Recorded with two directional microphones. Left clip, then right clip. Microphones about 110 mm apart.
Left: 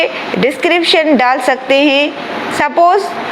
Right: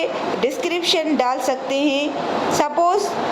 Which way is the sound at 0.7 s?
30° left (ahead or behind).